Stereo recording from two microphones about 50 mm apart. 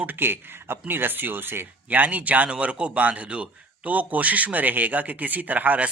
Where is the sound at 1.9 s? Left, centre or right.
Right.